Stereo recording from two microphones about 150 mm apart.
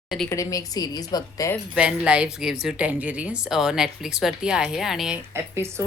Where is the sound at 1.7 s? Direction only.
5° right (ahead or behind).